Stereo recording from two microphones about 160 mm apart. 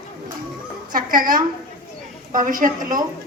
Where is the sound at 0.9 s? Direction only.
60° right (ahead or behind).